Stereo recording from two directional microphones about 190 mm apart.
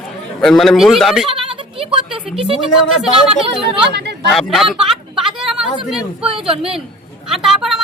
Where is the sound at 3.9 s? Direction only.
60° right (ahead or behind).